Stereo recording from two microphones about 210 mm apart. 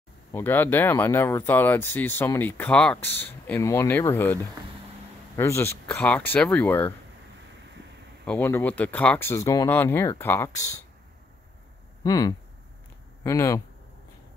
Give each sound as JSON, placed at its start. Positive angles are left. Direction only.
{"t": 0.3, "sound": "speech", "side_deg": 10}
{"t": 8.3, "sound": "speech", "side_deg": 10}
{"t": 12.0, "sound": "speech", "side_deg": 20}